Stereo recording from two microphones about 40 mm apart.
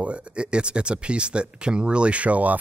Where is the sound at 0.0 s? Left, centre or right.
Right.